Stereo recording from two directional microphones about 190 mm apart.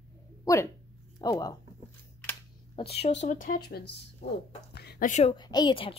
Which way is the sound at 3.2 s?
45° left (ahead or behind).